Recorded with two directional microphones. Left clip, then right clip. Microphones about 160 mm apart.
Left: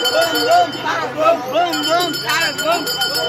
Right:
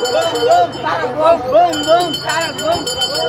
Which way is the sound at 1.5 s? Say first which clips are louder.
Right 5 dB; 65° right (ahead or behind).